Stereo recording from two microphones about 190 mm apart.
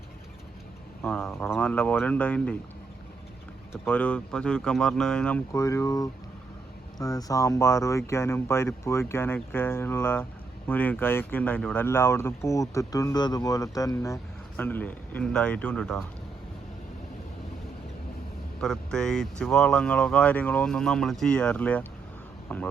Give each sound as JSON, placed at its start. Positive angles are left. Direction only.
{"t": 1.0, "sound": "speech", "side_deg": 5}
{"t": 3.7, "sound": "speech", "side_deg": 5}
{"t": 5.5, "sound": "speech", "side_deg": 15}
{"t": 18.6, "sound": "speech", "side_deg": 5}